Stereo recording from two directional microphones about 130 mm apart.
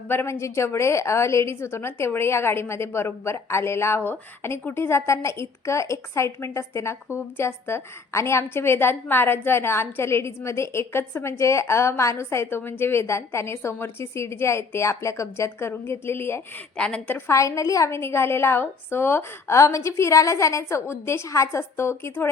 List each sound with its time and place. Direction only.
0.1 s a woman's voice: 20° left (ahead or behind)
16.7 s a woman's voice: 5° left (ahead or behind)